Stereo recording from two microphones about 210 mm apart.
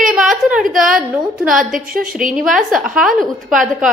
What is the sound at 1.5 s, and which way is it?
A woman's voice, centre (ahead or behind).